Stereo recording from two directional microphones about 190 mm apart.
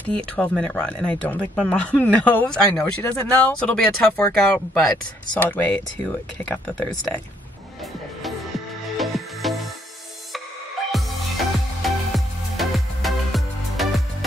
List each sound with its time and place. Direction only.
0.1 s speech: 5° left (ahead or behind)
8.9 s music: centre (ahead or behind)
10.9 s music: centre (ahead or behind)